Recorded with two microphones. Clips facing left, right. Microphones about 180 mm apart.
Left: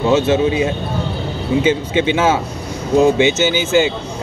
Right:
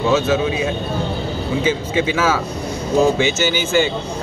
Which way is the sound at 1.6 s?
25° left (ahead or behind).